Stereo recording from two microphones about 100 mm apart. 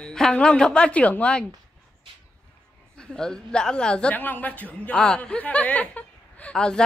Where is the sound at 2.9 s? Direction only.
5° left (ahead or behind).